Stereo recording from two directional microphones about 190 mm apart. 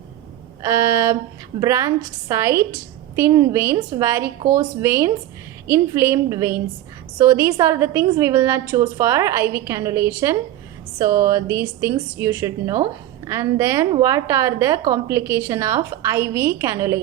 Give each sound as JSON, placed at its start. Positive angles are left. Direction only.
{"t": 0.6, "sound": "a woman's voice", "side_deg": -15}